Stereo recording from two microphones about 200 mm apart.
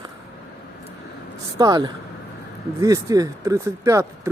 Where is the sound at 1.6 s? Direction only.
20° right (ahead or behind).